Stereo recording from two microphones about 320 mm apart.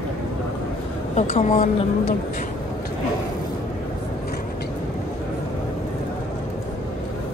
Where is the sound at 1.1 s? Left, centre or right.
Left.